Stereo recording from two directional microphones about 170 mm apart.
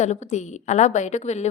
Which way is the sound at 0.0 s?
40° left (ahead or behind).